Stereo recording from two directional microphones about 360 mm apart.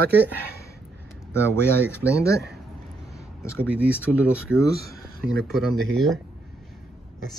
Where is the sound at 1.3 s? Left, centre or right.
Centre.